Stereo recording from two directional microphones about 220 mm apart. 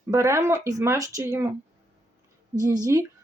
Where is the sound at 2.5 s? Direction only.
15° right (ahead or behind).